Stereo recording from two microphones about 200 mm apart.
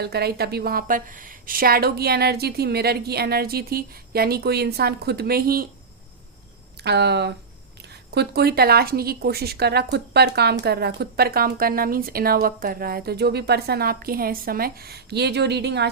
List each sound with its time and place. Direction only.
0.0 s speech: 55° right (ahead or behind)
6.7 s speech: 55° right (ahead or behind)